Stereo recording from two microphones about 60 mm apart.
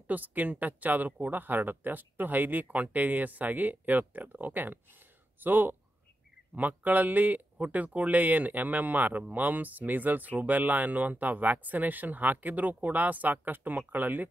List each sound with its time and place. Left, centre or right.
0.1 s speech: right